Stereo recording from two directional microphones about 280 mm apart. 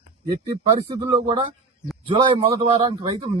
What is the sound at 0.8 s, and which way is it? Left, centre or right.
A man's voice, centre.